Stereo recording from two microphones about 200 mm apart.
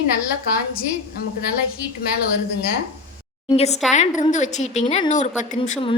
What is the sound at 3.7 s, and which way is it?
Speech, centre (ahead or behind).